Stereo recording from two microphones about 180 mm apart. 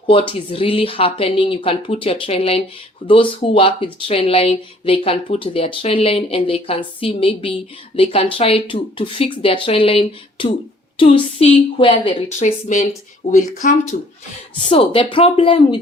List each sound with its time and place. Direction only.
0.1 s a woman's voice: 30° left (ahead or behind)
12.4 s speech: 45° left (ahead or behind)
14.7 s a woman's voice: 30° left (ahead or behind)